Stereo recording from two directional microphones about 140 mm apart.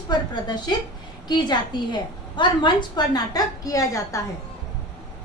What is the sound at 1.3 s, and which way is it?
A woman's voice, 30° left (ahead or behind).